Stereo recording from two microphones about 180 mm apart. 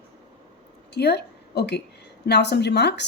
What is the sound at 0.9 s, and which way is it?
A woman's voice, 65° left (ahead or behind).